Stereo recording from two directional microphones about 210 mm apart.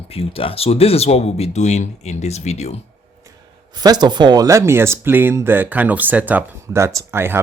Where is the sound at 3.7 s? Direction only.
20° right (ahead or behind).